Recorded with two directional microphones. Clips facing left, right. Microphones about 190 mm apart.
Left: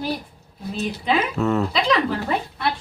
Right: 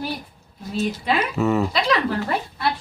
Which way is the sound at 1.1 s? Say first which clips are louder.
Left 1 dB; 5° right (ahead or behind).